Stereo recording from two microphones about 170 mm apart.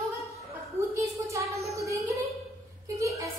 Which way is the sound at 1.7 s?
20° right (ahead or behind).